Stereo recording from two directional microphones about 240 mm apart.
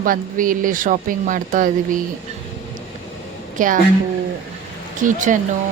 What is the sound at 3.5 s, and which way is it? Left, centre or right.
Speech, right.